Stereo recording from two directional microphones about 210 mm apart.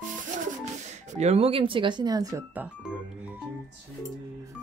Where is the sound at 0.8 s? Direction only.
35° right (ahead or behind); by 3.3 s 5° right (ahead or behind).